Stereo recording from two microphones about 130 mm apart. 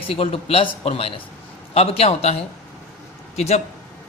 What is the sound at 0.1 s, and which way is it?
A man's voice, 45° left (ahead or behind).